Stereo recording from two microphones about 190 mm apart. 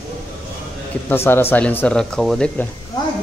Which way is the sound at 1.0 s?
10° left (ahead or behind).